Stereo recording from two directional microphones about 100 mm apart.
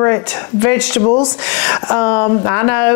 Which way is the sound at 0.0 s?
30° left (ahead or behind).